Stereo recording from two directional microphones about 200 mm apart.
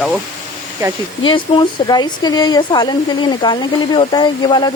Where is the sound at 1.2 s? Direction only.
25° left (ahead or behind).